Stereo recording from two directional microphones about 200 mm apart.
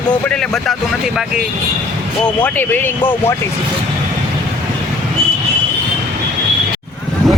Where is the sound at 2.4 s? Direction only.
10° left (ahead or behind).